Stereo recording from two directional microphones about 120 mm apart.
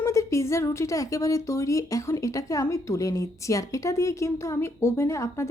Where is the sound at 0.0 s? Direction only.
25° left (ahead or behind).